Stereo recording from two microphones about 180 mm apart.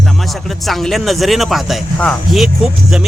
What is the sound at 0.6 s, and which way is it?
Speech, centre (ahead or behind).